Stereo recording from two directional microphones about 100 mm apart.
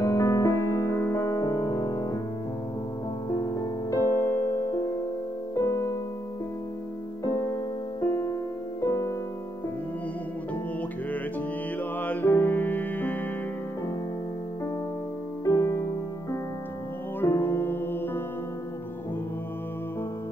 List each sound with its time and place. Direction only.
0.0 s music: 30° left (ahead or behind)
3.3 s music: 35° left (ahead or behind)
7.2 s music: 35° left (ahead or behind)
12.0 s music: 20° left (ahead or behind)
15.4 s music: 35° left (ahead or behind)